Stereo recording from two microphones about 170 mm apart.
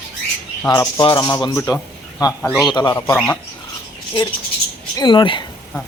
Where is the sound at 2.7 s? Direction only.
20° left (ahead or behind).